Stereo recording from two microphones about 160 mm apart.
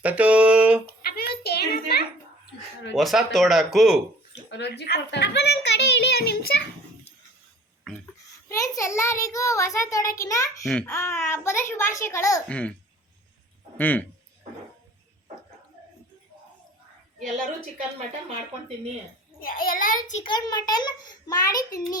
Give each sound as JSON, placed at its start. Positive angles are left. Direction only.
{"t": 0.0, "sound": "a sound", "side_deg": -10}
{"t": 1.1, "sound": "a sound", "side_deg": 80}
{"t": 2.9, "sound": "speech", "side_deg": 0}
{"t": 4.4, "sound": "a child's voice", "side_deg": 90}
{"t": 7.9, "sound": "a sound", "side_deg": 0}
{"t": 8.4, "sound": "a child's voice", "side_deg": 20}
{"t": 12.5, "sound": "a child's voice", "side_deg": 5}
{"t": 13.7, "sound": "a child's voice", "side_deg": 10}
{"t": 19.4, "sound": "a child's voice", "side_deg": 65}
{"t": 20.2, "sound": "a child's voice", "side_deg": 25}